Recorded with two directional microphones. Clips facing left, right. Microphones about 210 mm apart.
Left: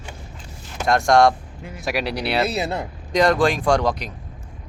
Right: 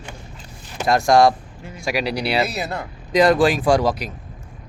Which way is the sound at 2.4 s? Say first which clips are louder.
Left 3 dB; 25° left (ahead or behind).